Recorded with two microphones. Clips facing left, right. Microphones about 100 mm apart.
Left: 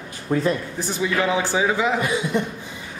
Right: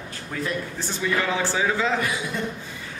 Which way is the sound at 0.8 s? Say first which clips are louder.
Left 3 dB; 15° left (ahead or behind).